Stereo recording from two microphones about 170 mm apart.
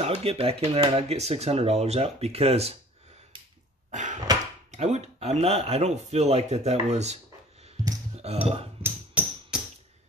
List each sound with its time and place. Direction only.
0.0 s speech: 35° right (ahead or behind)
3.9 s door: 45° right (ahead or behind)
4.6 s speech: 40° right (ahead or behind)
8.2 s speech: 35° right (ahead or behind)
8.8 s music: 10° right (ahead or behind)